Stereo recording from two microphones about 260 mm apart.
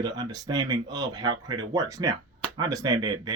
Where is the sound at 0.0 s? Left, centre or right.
Centre.